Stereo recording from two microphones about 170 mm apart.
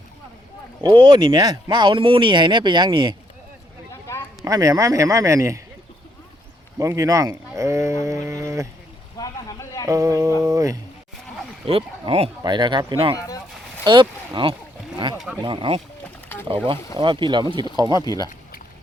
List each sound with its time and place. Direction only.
0.8 s speech: 25° right (ahead or behind)
4.1 s a sound: 15° left (ahead or behind)
4.4 s speech: 20° right (ahead or behind)
6.7 s speech: 20° right (ahead or behind)
9.1 s vehicle: 20° left (ahead or behind)
9.8 s speech: 20° right (ahead or behind)
11.6 s speech: 35° right (ahead or behind)
13.1 s speech: 20° left (ahead or behind)
13.8 s speech: 25° right (ahead or behind)
17.0 s speech: 30° right (ahead or behind)
18.0 s speech: 20° left (ahead or behind)